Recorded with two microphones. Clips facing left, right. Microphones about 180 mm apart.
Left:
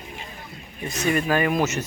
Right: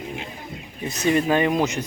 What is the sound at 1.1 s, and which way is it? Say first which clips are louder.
Speech: right 2 dB; 25° right (ahead or behind).